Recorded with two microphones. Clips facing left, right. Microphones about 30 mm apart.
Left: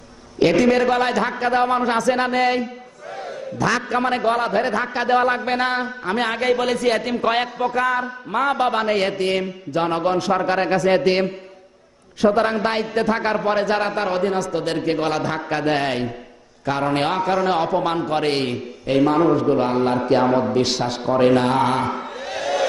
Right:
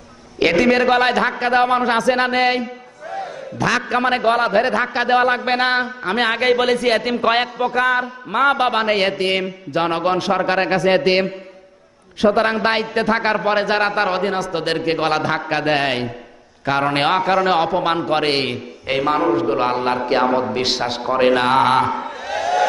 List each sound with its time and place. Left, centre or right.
0.3 s a man's voice: right
3.6 s a man's voice: right
5.8 s a man's voice: right
17.3 s a man's voice: centre
17.7 s a man's voice: right
22.2 s crowd: centre